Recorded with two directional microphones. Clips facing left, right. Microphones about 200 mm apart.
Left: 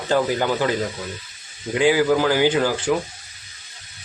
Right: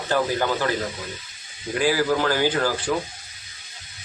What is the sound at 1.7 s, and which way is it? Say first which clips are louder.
Speech: left 4 dB; 20° left (ahead or behind).